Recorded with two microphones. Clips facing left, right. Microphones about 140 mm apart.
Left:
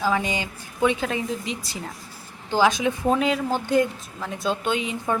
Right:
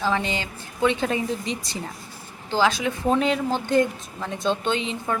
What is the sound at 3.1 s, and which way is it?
A woman's voice, 5° left (ahead or behind).